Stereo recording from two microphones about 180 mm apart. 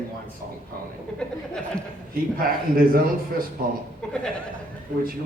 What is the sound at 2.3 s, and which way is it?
A man's voice, 55° right (ahead or behind).